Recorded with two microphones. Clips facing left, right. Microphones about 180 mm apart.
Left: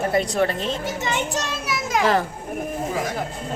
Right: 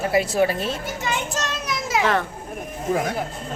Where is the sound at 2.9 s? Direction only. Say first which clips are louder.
Right 8 dB; 55° right (ahead or behind).